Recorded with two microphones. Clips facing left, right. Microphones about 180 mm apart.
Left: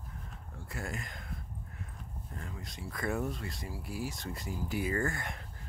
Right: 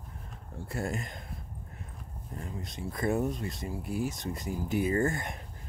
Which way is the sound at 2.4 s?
20° right (ahead or behind).